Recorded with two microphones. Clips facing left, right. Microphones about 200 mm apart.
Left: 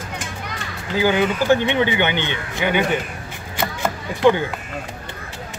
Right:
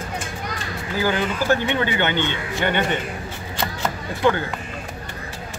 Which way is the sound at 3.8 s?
15° left (ahead or behind).